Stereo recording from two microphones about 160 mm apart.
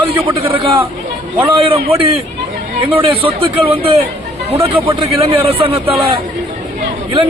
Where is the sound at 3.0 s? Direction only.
35° right (ahead or behind).